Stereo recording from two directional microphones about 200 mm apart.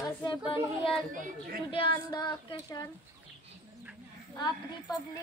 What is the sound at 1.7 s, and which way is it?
Speech, 25° left (ahead or behind).